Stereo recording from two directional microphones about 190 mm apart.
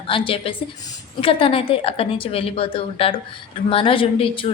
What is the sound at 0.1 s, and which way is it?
A woman's voice, 30° left (ahead or behind).